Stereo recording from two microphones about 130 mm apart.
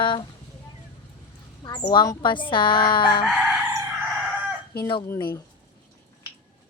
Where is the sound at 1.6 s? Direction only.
35° left (ahead or behind).